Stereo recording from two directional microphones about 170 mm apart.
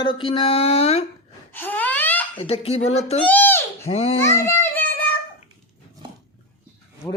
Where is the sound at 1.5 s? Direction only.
10° left (ahead or behind).